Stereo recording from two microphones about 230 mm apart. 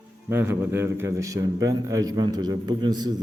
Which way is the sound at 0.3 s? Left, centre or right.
Centre.